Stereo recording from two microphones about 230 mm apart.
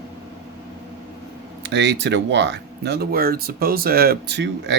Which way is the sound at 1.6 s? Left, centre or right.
Right.